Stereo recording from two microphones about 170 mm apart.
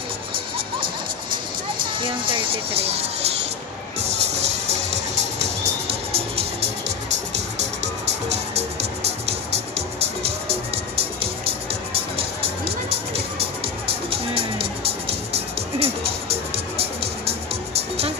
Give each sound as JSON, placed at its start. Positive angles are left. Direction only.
{"t": 2.0, "sound": "speech", "side_deg": -30}
{"t": 5.4, "sound": "music", "side_deg": -40}
{"t": 7.8, "sound": "music", "side_deg": -40}
{"t": 14.1, "sound": "music", "side_deg": -35}